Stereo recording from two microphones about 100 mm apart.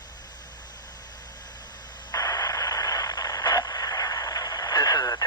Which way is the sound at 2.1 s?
40° left (ahead or behind).